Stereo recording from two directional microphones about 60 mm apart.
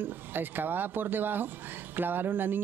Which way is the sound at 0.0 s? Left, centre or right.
Right.